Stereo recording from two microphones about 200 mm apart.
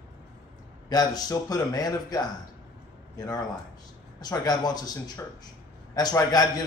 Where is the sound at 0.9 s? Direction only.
20° left (ahead or behind).